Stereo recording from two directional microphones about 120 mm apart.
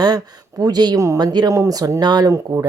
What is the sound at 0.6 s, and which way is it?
A woman's voice, 35° right (ahead or behind).